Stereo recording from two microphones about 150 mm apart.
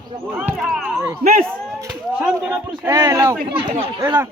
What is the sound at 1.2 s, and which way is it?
Speech, 85° right.